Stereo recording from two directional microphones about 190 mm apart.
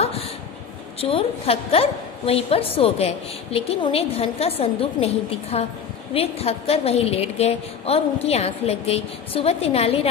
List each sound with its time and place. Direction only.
1.0 s a woman's voice: 30° left (ahead or behind)